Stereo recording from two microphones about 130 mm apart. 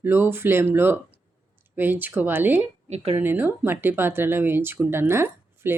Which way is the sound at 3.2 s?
15° right (ahead or behind).